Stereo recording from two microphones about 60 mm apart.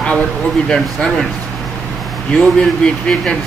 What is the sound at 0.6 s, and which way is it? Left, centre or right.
Speech, centre.